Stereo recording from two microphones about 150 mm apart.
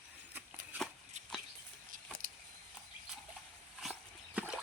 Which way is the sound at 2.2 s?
65° right (ahead or behind).